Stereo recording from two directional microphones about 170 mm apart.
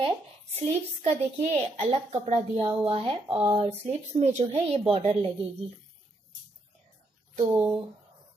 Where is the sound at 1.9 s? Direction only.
40° right (ahead or behind).